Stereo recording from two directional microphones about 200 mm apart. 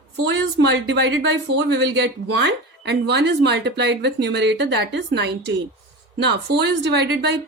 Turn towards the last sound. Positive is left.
turn(degrees=-60)  # may be behind; listen again after turning